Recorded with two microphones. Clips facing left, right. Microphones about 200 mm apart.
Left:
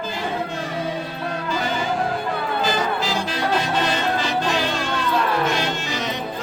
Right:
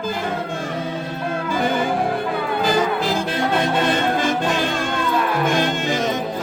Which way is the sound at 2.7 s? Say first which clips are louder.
Right 6 dB; 55° right (ahead or behind).